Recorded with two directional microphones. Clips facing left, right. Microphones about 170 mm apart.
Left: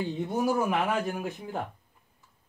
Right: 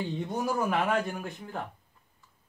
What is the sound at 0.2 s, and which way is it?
Speech, 5° left (ahead or behind).